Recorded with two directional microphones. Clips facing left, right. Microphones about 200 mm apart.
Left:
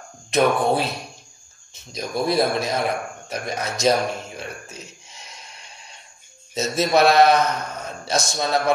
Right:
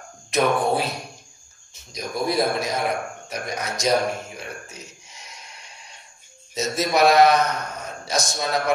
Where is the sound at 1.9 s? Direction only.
25° left (ahead or behind).